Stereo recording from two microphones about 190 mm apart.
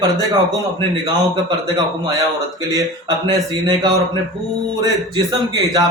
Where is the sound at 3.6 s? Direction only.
20° right (ahead or behind).